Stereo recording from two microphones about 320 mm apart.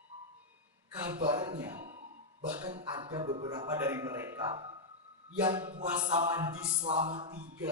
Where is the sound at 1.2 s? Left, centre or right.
Centre.